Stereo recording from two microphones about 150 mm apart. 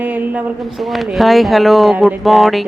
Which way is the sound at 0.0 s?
10° right (ahead or behind).